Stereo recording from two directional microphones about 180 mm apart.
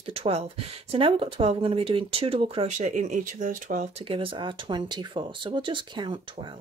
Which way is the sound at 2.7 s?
45° right (ahead or behind).